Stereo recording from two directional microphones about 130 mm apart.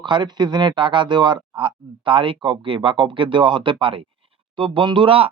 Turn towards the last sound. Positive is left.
turn(degrees=-40)  # may be behind; listen again after turning